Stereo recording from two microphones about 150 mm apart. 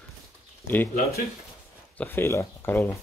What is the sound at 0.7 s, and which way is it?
Speech, 15° left (ahead or behind).